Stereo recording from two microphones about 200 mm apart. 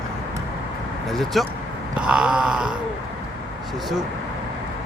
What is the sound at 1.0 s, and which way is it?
Speech, centre (ahead or behind).